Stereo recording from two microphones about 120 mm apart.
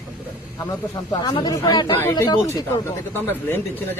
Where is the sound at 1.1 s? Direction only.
40° left (ahead or behind).